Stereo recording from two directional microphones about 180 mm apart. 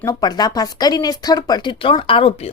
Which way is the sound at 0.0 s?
20° left (ahead or behind).